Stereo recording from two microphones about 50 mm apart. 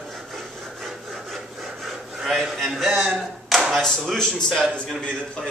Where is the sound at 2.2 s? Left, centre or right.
Centre.